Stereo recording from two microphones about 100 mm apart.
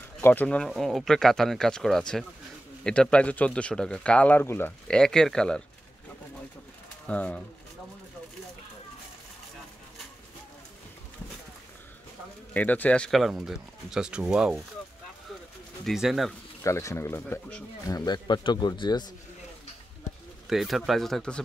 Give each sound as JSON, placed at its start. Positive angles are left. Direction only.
{"t": 0.2, "sound": "speech", "side_deg": 15}
{"t": 0.7, "sound": "speech", "side_deg": 0}
{"t": 4.8, "sound": "speech", "side_deg": 5}
{"t": 7.1, "sound": "speech", "side_deg": 10}
{"t": 12.5, "sound": "speech", "side_deg": 15}
{"t": 15.8, "sound": "speech", "side_deg": 0}
{"t": 16.6, "sound": "speech", "side_deg": 30}
{"t": 17.8, "sound": "speech", "side_deg": 40}
{"t": 20.4, "sound": "speech", "side_deg": 0}